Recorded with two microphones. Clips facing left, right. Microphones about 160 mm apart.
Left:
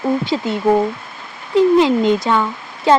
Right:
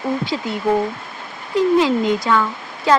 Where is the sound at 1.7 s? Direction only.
25° left (ahead or behind).